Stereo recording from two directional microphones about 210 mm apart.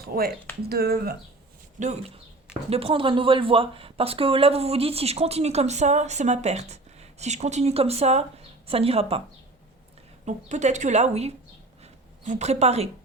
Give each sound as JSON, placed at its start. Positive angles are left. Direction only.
{"t": 0.1, "sound": "a woman's voice", "side_deg": -40}
{"t": 1.8, "sound": "a woman's voice", "side_deg": -35}
{"t": 10.2, "sound": "a woman's voice", "side_deg": -35}